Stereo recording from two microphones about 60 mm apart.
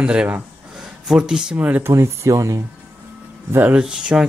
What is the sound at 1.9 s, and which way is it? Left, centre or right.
Speech, right.